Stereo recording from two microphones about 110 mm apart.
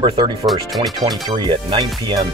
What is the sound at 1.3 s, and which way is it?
Speech, 45° right (ahead or behind).